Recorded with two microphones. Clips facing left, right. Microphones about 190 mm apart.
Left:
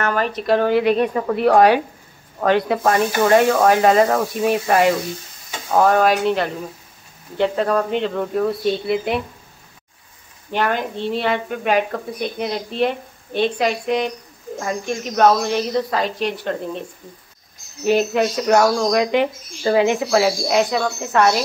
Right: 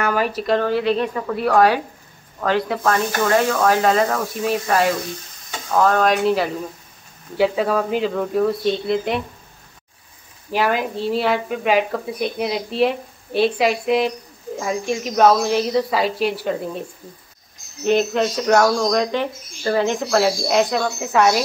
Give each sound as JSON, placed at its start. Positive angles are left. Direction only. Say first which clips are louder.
{"t": 0.0, "sound": "speech", "louder": "even", "side_deg": -10}
{"t": 0.6, "sound": "a woman's voice", "louder": "left 4 dB", "side_deg": 15}
{"t": 10.5, "sound": "speech", "louder": "right 1 dB", "side_deg": -5}
{"t": 17.8, "sound": "speech", "louder": "left 1 dB", "side_deg": 5}